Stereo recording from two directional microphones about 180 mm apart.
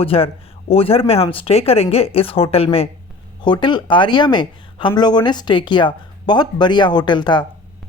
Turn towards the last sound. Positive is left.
turn(degrees=25)  # may be behind; listen again after turning